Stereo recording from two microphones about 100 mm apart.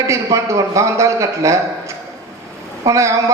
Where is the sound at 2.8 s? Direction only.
30° right (ahead or behind).